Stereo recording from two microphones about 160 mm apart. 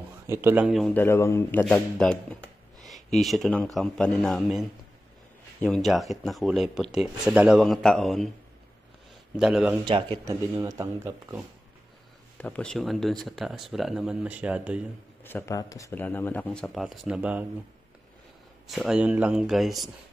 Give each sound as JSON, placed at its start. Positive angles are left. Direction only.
{"t": 0.3, "sound": "speech", "side_deg": -15}
{"t": 0.7, "sound": "speech", "side_deg": 0}
{"t": 0.9, "sound": "speech", "side_deg": 15}
{"t": 9.4, "sound": "speech", "side_deg": -5}
{"t": 9.8, "sound": "speech", "side_deg": -30}
{"t": 10.2, "sound": "speech", "side_deg": -20}
{"t": 12.4, "sound": "speech", "side_deg": 10}
{"t": 15.2, "sound": "speech", "side_deg": 15}
{"t": 18.7, "sound": "speech", "side_deg": 0}